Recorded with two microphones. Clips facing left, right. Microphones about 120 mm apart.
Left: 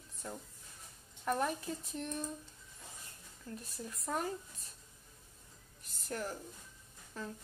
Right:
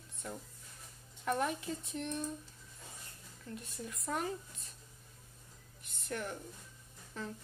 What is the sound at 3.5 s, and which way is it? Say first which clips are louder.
Speech: right 1 dB; 35° left (ahead or behind).